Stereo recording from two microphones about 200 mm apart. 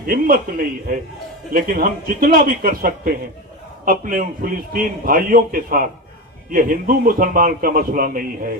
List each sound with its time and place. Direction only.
0.0 s a man's voice: 45° right (ahead or behind)